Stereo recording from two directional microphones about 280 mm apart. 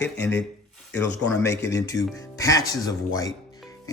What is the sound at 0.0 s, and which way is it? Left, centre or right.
Speech, centre.